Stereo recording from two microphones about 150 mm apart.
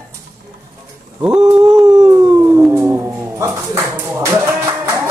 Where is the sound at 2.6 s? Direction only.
15° right (ahead or behind).